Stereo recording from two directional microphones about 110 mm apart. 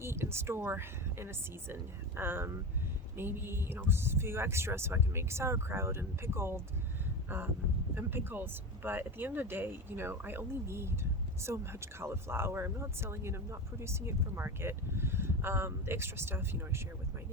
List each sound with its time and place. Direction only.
0.0 s speech: 25° right (ahead or behind)